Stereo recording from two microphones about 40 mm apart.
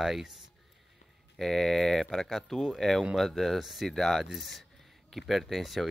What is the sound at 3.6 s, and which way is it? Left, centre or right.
Speech, centre.